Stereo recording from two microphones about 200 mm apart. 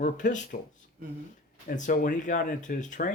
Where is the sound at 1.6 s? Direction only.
40° left (ahead or behind).